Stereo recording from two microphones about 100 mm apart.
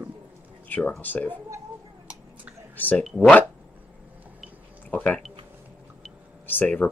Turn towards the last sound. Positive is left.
turn(degrees=15)  # may be behind; listen again after turning